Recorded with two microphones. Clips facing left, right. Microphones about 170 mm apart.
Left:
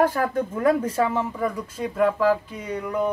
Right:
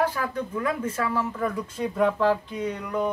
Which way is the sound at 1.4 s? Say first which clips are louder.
Left 1 dB; 10° left (ahead or behind).